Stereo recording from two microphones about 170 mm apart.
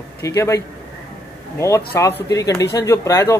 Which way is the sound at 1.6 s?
15° left (ahead or behind).